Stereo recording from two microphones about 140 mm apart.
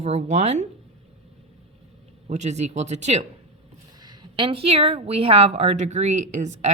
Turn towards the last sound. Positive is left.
turn(degrees=-55)  # may be behind; listen again after turning